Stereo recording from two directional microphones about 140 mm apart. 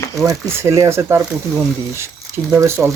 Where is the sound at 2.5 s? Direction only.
20° right (ahead or behind).